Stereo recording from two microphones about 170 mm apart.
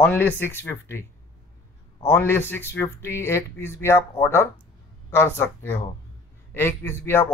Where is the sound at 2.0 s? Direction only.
15° left (ahead or behind).